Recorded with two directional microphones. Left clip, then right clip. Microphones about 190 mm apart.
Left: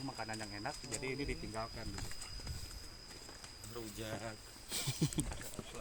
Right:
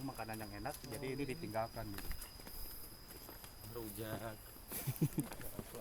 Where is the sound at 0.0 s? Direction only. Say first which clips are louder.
Left 2 dB; 25° left (ahead or behind).